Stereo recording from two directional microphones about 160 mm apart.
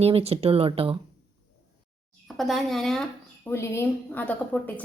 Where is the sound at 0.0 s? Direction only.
40° right (ahead or behind).